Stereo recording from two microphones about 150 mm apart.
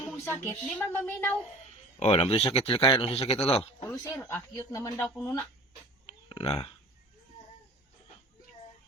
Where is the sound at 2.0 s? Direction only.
45° left (ahead or behind).